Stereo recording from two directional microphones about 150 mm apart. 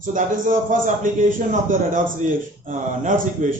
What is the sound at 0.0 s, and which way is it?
A man's voice, 60° right (ahead or behind).